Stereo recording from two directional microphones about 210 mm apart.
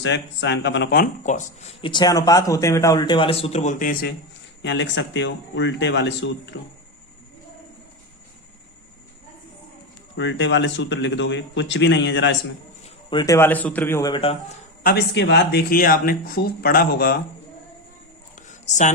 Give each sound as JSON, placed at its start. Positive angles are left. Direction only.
{"t": 0.0, "sound": "speech", "side_deg": 55}
{"t": 1.8, "sound": "speech", "side_deg": 20}
{"t": 4.6, "sound": "speech", "side_deg": 60}
{"t": 10.2, "sound": "speech", "side_deg": 60}
{"t": 12.8, "sound": "speech", "side_deg": 20}
{"t": 14.8, "sound": "speech", "side_deg": 55}
{"t": 18.3, "sound": "a sound", "side_deg": 35}